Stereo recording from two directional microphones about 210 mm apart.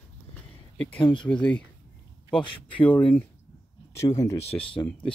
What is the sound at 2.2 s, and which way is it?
Speech, 25° left (ahead or behind).